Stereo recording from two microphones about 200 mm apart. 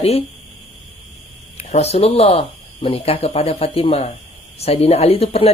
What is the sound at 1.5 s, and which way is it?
Speech, 30° left (ahead or behind).